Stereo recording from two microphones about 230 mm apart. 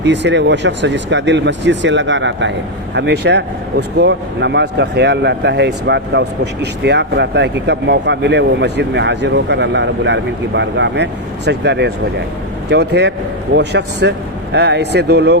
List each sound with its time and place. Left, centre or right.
0.0 s speech: right